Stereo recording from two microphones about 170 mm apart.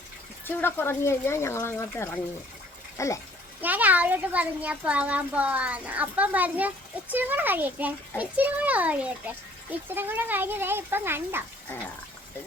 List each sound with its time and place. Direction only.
0.4 s speech: 10° left (ahead or behind)
3.6 s a child's voice: 10° right (ahead or behind)